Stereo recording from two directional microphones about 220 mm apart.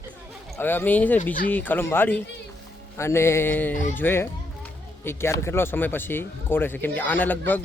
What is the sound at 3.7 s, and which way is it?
Speech, 35° left (ahead or behind).